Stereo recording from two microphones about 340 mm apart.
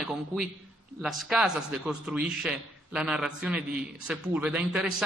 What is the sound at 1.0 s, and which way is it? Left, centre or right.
A man's voice, centre.